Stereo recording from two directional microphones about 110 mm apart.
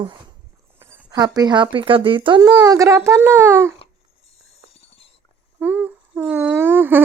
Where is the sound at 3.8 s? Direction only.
65° left (ahead or behind).